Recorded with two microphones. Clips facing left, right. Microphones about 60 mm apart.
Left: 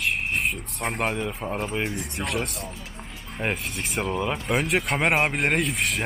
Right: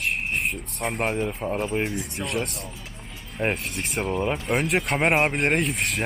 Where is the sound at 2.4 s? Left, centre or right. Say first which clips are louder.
Left 1 dB; left.